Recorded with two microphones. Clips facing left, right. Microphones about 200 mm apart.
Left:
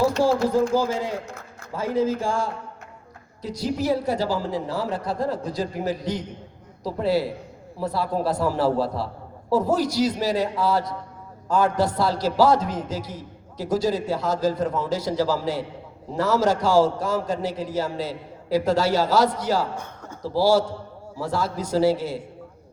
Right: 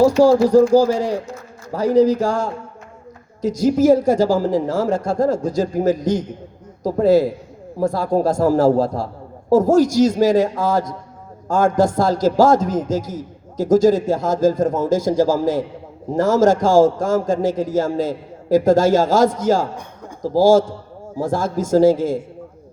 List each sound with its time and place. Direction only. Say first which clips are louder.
0.2 s a man's voice: right 8 dB; 40° right (ahead or behind)
19.7 s a sound: right 2 dB; 15° right (ahead or behind)
20.2 s a man's voice: right 6 dB; 45° right (ahead or behind)